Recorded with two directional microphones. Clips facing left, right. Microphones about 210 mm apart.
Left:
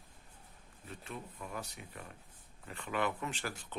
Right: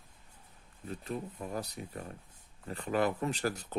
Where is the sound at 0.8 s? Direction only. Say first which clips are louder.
Right 8 dB; 35° right (ahead or behind).